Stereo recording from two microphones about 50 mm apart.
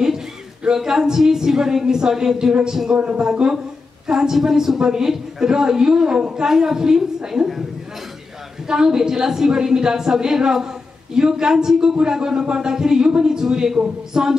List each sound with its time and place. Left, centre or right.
0.7 s a man's voice: centre
8.6 s a man's voice: centre